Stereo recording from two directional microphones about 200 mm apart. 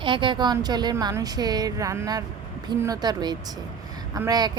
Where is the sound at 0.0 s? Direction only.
25° right (ahead or behind).